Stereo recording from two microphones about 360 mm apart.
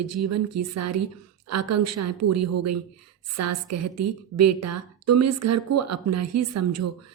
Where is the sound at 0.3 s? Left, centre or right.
Right.